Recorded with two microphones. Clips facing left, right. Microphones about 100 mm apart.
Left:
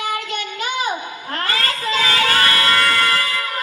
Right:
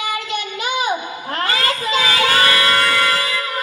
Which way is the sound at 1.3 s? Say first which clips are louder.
Right 2 dB; 20° right (ahead or behind).